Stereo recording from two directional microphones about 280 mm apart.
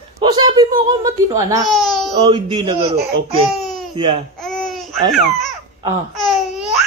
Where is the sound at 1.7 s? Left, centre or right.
Centre.